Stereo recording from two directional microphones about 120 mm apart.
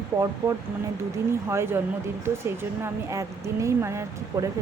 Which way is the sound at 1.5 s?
20° right (ahead or behind).